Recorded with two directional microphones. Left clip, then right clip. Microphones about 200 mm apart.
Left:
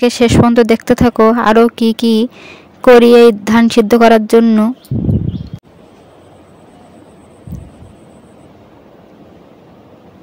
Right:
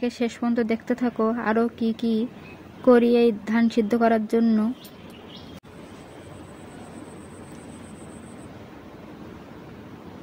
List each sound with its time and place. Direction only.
0.0 s speech: 55° left (ahead or behind)